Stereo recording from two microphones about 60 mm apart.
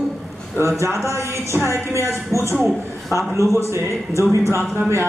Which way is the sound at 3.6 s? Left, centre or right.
Right.